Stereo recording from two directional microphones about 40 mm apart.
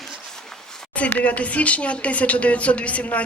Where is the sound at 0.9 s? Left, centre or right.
Left.